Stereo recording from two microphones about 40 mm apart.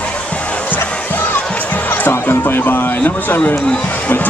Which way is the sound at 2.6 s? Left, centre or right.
Left.